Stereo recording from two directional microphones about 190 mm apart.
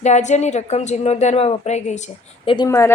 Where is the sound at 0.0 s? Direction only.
40° left (ahead or behind).